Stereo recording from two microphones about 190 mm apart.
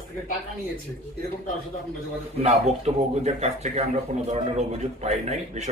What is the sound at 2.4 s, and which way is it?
A man's voice, 35° right (ahead or behind).